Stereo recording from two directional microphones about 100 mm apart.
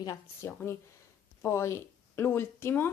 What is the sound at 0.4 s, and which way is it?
Speech, 25° left (ahead or behind).